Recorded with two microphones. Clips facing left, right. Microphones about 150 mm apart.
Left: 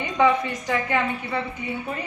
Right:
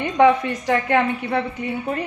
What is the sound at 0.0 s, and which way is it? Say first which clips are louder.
A woman's voice: right 5 dB; 60° right (ahead or behind).